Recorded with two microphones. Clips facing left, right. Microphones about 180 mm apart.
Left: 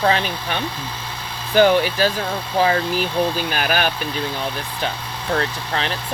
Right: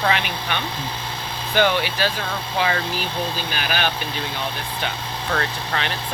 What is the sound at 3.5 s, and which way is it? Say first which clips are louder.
Speech: left 4 dB; 45° left (ahead or behind).